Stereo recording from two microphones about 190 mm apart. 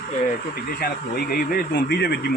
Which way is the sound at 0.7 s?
55° left (ahead or behind).